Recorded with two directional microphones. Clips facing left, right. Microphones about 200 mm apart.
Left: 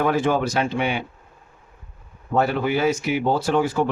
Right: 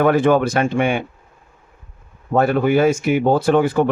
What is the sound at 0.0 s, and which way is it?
A man's voice, 55° right (ahead or behind).